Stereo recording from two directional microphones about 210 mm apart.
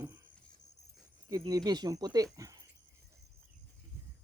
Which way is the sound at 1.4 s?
20° right (ahead or behind).